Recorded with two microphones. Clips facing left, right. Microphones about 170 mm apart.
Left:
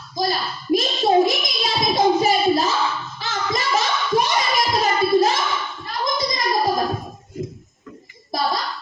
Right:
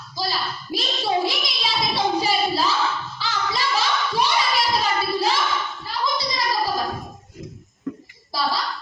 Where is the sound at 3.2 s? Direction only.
45° left (ahead or behind).